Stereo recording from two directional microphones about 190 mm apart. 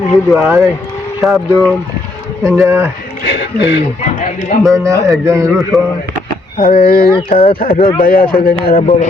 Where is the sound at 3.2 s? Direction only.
65° left (ahead or behind).